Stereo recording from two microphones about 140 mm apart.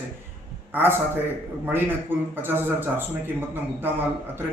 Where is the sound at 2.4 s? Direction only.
15° right (ahead or behind).